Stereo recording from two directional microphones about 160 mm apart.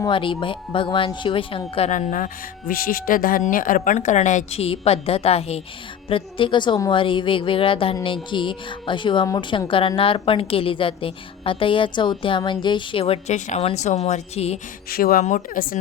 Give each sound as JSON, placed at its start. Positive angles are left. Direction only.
{"t": 0.0, "sound": "a woman's voice", "side_deg": 30}
{"t": 1.9, "sound": "a woman's voice", "side_deg": 50}
{"t": 14.8, "sound": "speech", "side_deg": 65}
{"t": 15.2, "sound": "speech", "side_deg": 55}